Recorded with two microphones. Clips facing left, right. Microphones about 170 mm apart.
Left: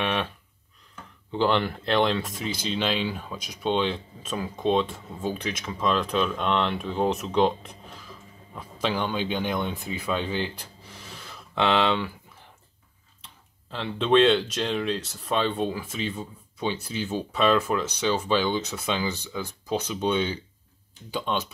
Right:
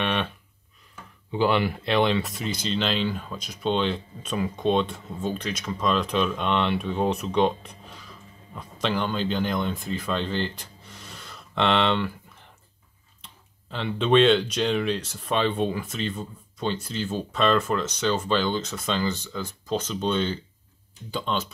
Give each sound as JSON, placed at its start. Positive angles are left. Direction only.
{"t": 0.0, "sound": "a sound", "side_deg": 5}
{"t": 1.3, "sound": "speech", "side_deg": -5}
{"t": 13.2, "sound": "speech", "side_deg": 0}